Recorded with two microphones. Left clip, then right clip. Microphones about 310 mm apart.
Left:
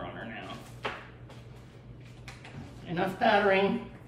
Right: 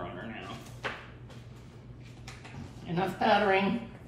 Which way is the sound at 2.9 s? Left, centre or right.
Centre.